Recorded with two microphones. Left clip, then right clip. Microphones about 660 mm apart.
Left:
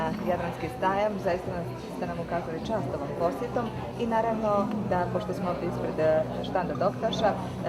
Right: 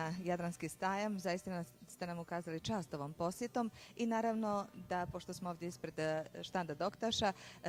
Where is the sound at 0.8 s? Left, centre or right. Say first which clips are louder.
Left 12 dB; right.